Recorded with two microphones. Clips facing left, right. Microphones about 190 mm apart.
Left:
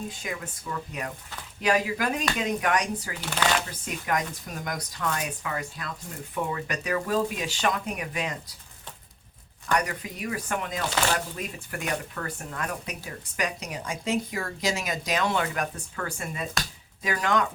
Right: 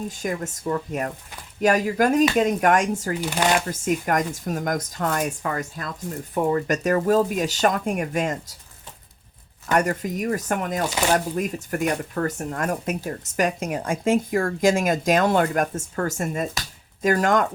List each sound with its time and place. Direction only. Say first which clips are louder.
0.1 s speech: right 8 dB; 45° right (ahead or behind)
9.7 s speech: right 7 dB; 45° right (ahead or behind)